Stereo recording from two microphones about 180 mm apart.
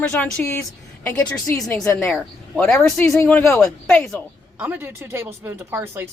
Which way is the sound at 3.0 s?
15° left (ahead or behind).